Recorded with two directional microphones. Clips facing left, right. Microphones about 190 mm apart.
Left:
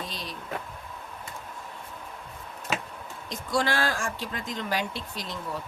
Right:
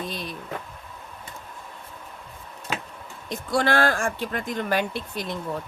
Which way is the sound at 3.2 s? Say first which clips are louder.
Right 4 dB; 60° right (ahead or behind).